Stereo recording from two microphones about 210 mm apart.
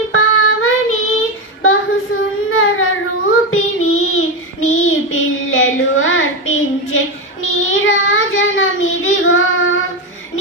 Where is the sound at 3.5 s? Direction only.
75° left (ahead or behind).